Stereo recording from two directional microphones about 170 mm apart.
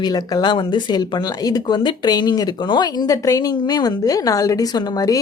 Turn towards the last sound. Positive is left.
turn(degrees=20)  # may be behind; listen again after turning